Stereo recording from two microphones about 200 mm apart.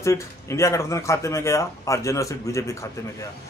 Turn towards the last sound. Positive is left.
turn(degrees=15)  # may be behind; listen again after turning